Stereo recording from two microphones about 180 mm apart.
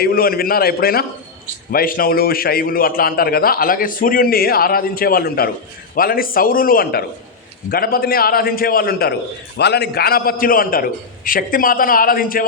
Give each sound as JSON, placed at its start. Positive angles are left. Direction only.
{"t": 0.0, "sound": "a man's voice", "side_deg": 55}